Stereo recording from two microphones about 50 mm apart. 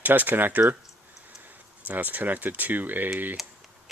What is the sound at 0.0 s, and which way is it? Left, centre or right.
Speech, right.